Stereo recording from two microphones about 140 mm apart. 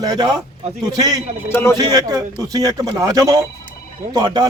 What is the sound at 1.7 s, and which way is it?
A man's voice, 25° right (ahead or behind).